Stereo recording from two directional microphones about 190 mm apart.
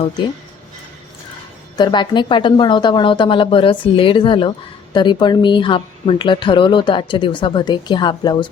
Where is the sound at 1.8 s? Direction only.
25° left (ahead or behind).